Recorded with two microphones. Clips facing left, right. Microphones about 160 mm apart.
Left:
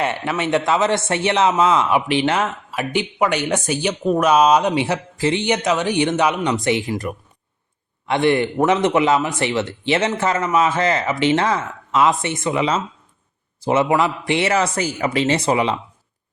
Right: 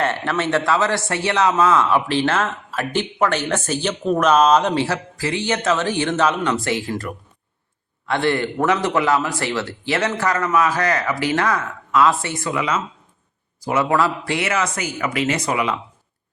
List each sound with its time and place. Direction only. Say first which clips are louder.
0.0 s a man's voice: even; 15° left (ahead or behind); by 15.8 s 30° left (ahead or behind)